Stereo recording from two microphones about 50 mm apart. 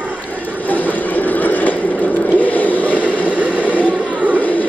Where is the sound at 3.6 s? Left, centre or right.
Left.